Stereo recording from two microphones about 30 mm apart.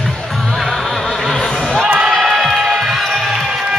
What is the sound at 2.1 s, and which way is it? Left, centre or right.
Crowd, centre.